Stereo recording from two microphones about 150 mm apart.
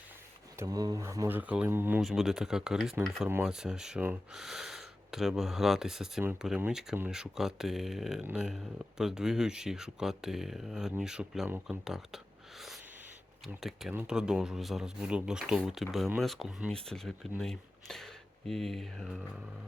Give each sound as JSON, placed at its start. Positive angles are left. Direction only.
{"t": 0.5, "sound": "speech", "side_deg": -20}
{"t": 1.4, "sound": "speech", "side_deg": -10}
{"t": 2.0, "sound": "speech", "side_deg": 0}
{"t": 11.9, "sound": "whispering", "side_deg": -5}
{"t": 13.4, "sound": "speech", "side_deg": 0}